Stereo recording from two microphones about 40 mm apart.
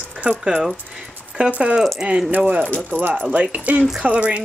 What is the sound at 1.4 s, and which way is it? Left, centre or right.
Rattle, right.